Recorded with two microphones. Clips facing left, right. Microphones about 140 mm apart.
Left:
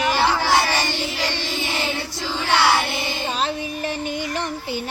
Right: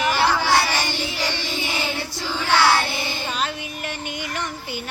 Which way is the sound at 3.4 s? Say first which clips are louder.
Left 3 dB; 35° left (ahead or behind).